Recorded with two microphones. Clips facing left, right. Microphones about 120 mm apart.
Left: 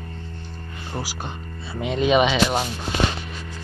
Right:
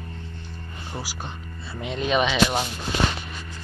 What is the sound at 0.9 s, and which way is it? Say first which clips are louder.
Speech: left 4 dB; 5° left (ahead or behind).